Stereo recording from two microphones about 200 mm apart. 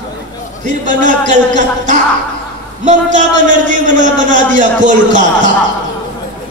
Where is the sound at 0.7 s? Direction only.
40° right (ahead or behind).